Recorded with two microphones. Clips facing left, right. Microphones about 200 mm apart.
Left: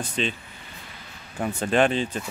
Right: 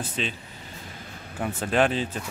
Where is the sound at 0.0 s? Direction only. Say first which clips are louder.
Left 3 dB; 5° right (ahead or behind).